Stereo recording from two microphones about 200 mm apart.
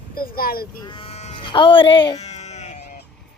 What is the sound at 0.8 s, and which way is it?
Speech, 25° left (ahead or behind).